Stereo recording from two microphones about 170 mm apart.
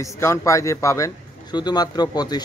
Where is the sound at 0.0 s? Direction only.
15° left (ahead or behind).